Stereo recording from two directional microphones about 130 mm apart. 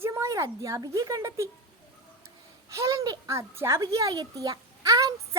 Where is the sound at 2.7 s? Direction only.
25° right (ahead or behind).